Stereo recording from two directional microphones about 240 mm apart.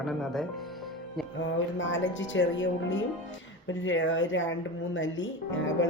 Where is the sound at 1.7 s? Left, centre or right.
Left.